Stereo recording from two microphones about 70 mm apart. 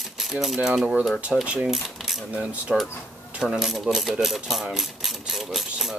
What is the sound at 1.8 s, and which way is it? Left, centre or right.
Coin, centre.